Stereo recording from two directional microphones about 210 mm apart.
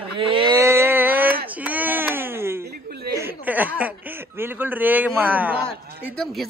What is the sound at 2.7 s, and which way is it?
Chuckle, 50° right (ahead or behind).